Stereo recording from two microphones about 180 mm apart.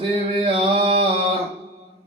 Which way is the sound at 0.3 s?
35° right (ahead or behind).